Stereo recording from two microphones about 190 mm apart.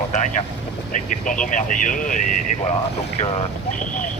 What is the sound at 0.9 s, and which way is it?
Speech, 45° left (ahead or behind).